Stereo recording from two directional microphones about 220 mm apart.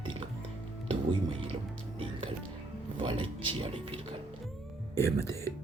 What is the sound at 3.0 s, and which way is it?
Music, 25° right (ahead or behind).